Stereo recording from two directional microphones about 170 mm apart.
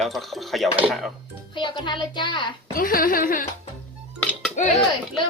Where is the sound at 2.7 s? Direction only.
60° left (ahead or behind).